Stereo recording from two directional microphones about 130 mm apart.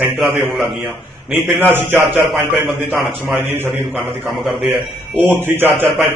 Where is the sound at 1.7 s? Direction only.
15° right (ahead or behind).